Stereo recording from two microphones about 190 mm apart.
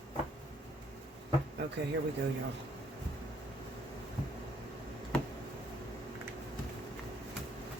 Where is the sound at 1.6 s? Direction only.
60° right (ahead or behind).